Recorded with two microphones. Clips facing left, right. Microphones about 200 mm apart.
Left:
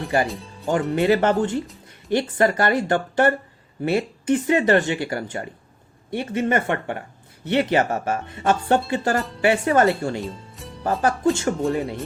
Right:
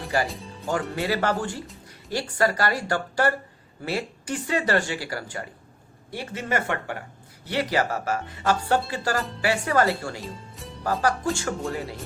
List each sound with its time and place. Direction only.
0.1 s speech: 20° left (ahead or behind)
10.2 s speech: centre (ahead or behind)
11.0 s speech: 25° left (ahead or behind)